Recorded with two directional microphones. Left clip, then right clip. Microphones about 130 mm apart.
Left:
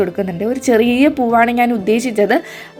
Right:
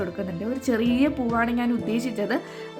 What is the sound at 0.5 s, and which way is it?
A woman's voice, 20° left (ahead or behind).